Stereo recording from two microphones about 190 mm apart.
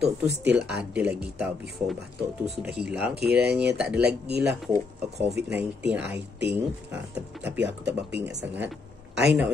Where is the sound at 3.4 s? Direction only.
60° right (ahead or behind).